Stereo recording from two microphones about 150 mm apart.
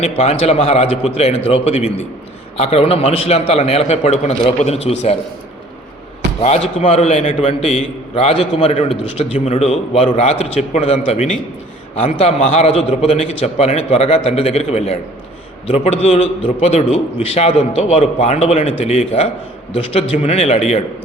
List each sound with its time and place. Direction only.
0.0 s a man's voice: 40° left (ahead or behind)
6.4 s a man's voice: 45° left (ahead or behind)